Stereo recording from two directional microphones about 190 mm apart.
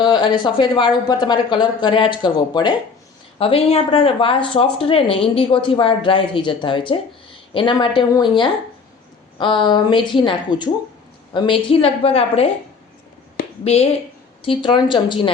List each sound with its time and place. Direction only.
0.0 s a woman's voice: 25° left (ahead or behind)
14.4 s speech: 25° left (ahead or behind)